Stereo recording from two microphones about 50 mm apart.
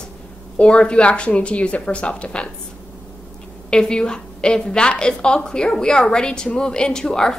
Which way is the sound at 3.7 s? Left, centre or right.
Centre.